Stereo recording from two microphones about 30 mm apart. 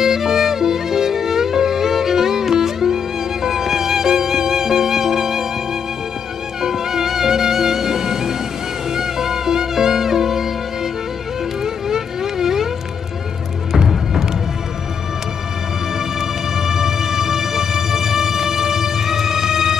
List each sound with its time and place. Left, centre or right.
0.0 s music: centre
6.6 s music: centre
11.6 s music: centre
13.7 s music: centre
16.2 s music: centre